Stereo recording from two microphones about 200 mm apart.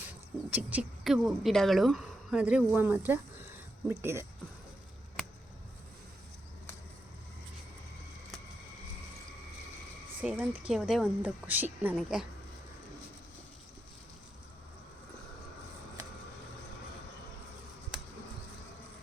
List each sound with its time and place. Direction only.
0.5 s a woman's voice: 5° right (ahead or behind)
10.2 s a woman's voice: 5° right (ahead or behind)